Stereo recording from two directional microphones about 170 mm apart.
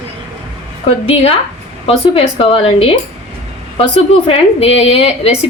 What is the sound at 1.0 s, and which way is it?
A woman's voice, 35° left (ahead or behind).